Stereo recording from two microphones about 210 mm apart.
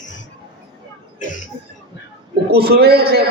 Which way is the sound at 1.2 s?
35° left (ahead or behind).